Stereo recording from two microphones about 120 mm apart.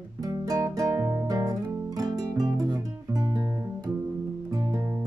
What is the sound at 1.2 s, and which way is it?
Guitar, 30° right (ahead or behind).